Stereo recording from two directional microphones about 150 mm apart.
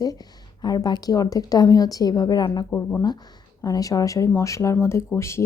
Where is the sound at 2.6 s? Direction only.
15° left (ahead or behind).